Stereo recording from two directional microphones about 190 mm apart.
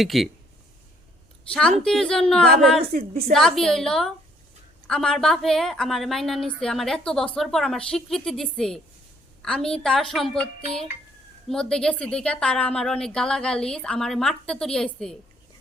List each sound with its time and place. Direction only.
0.0 s a woman's voice: centre (ahead or behind)
1.8 s a woman's voice: centre (ahead or behind)
2.9 s a woman's voice: 50° right (ahead or behind)
3.3 s a woman's voice: centre (ahead or behind)